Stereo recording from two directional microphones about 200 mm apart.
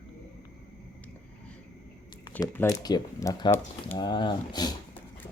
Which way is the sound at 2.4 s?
15° left (ahead or behind).